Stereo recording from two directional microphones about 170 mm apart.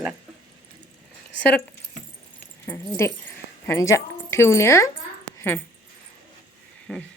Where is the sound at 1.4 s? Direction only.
10° left (ahead or behind).